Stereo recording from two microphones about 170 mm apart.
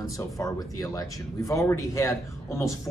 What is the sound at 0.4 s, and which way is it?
Speech, 20° left (ahead or behind).